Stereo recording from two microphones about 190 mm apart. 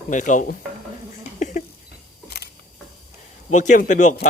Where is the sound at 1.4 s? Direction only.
40° left (ahead or behind).